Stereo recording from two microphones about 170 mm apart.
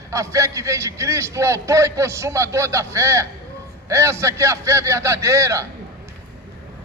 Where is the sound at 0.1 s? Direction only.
20° right (ahead or behind).